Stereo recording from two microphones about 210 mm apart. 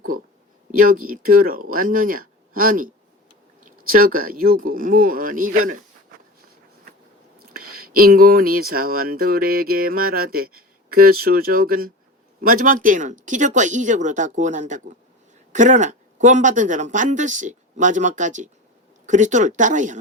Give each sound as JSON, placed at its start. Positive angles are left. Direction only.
{"t": 0.7, "sound": "speech", "side_deg": -40}
{"t": 7.5, "sound": "speech", "side_deg": -45}